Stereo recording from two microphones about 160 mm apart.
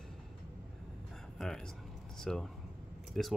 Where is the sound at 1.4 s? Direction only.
5° left (ahead or behind).